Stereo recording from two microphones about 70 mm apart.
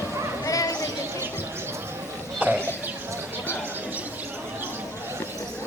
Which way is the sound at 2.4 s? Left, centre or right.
Right.